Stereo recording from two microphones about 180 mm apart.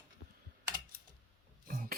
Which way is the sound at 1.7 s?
55° right (ahead or behind).